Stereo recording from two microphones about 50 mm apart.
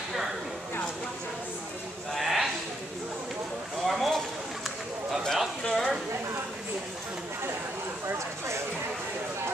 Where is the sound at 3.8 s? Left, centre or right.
Centre.